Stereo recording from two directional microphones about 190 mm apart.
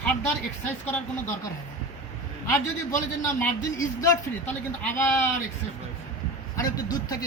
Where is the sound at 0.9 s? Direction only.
10° left (ahead or behind).